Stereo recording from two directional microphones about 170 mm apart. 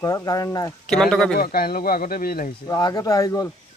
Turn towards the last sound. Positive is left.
turn(degrees=20)  # may be behind; listen again after turning